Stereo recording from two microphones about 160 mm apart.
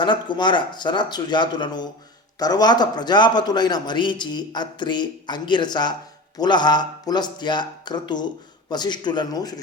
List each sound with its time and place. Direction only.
0.0 s a man's voice: 30° left (ahead or behind)